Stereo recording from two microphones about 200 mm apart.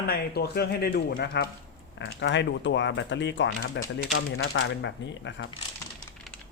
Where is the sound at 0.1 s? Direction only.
50° left (ahead or behind).